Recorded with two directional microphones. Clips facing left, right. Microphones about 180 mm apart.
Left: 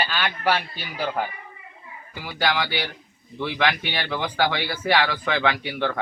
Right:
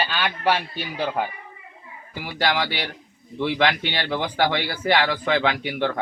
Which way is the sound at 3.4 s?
20° right (ahead or behind).